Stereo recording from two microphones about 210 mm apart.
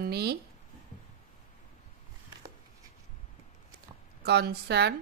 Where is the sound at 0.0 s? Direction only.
50° right (ahead or behind).